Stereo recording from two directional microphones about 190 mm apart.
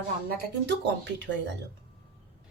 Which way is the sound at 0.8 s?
70° right (ahead or behind).